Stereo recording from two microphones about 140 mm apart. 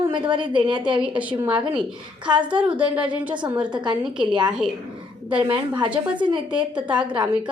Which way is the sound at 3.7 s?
35° right (ahead or behind).